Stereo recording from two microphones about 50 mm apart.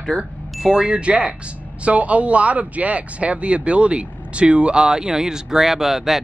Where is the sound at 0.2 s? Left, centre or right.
Centre.